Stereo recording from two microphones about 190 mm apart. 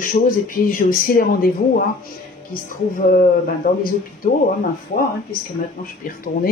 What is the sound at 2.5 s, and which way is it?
Speech, 45° left (ahead or behind).